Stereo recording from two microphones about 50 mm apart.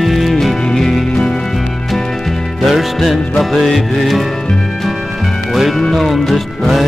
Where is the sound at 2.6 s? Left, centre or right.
Centre.